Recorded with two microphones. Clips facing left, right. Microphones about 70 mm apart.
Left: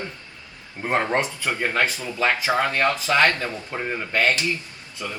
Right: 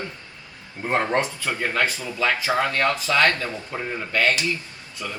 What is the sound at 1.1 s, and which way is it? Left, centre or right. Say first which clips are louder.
Speech: even; left.